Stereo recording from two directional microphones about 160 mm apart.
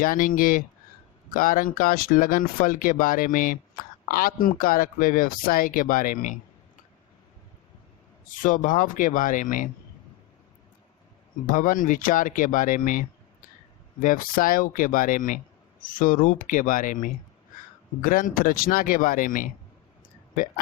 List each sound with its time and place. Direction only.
0.0 s speech: 60° left (ahead or behind)
8.4 s speech: 55° left (ahead or behind)
11.4 s speech: 55° left (ahead or behind)